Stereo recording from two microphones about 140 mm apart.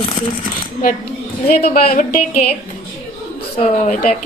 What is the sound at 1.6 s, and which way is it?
Speech, 90° left.